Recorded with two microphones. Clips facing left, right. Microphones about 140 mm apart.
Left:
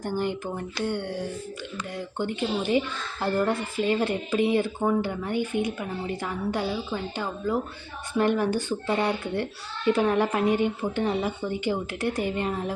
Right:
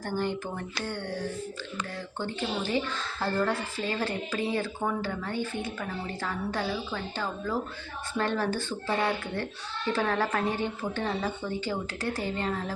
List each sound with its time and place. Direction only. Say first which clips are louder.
0.0 s a woman's voice: left 2 dB; 15° left (ahead or behind)
2.1 s a woman's voice: left 4 dB; 15° left (ahead or behind)